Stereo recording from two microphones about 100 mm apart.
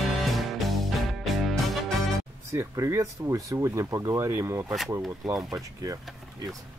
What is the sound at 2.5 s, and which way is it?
Speech, 30° right (ahead or behind).